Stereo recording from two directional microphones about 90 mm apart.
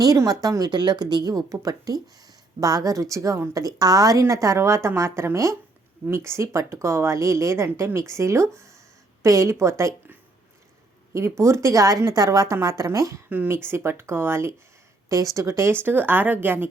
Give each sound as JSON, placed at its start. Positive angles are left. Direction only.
{"t": 0.0, "sound": "speech", "side_deg": -45}
{"t": 11.1, "sound": "speech", "side_deg": -30}
{"t": 13.3, "sound": "speech", "side_deg": -25}